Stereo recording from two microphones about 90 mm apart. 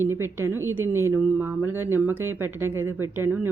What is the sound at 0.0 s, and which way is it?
A woman's voice, 30° right (ahead or behind).